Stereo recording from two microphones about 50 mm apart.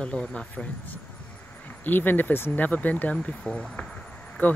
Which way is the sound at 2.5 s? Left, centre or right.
Left.